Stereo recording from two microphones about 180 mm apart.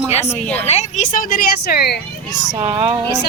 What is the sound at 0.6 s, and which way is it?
Speech, 40° left (ahead or behind).